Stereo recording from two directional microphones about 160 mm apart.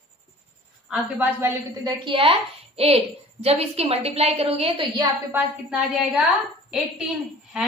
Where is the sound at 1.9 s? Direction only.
30° right (ahead or behind).